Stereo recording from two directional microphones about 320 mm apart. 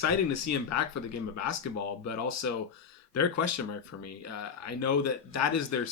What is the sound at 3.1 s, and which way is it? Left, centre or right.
Speech, left.